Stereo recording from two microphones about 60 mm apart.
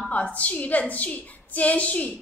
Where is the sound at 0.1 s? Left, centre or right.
Left.